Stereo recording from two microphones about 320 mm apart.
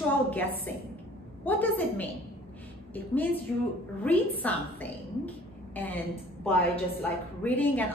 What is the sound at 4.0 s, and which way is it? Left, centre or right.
A woman's voice, centre.